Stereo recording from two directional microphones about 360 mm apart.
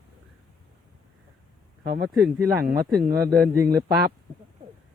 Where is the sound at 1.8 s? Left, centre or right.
Right.